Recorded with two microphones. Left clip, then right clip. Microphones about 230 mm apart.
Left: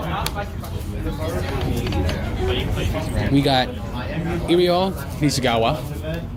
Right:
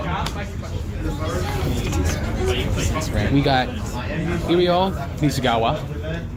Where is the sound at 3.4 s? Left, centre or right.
Left.